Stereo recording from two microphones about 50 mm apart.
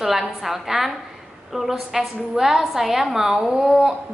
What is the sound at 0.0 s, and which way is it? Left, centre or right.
A woman's voice, centre.